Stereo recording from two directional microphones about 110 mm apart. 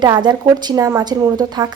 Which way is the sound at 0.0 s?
40° right (ahead or behind).